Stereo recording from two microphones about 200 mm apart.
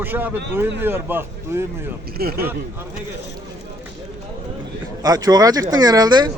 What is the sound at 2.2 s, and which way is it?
Speech, 50° right (ahead or behind).